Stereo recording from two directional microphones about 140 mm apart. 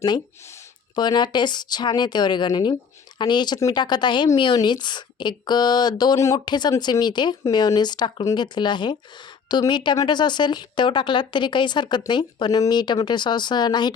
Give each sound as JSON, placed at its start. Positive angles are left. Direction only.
{"t": 0.9, "sound": "speech", "side_deg": 30}